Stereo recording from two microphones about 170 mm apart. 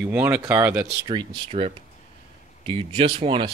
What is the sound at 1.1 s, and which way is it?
Speech, 30° right (ahead or behind).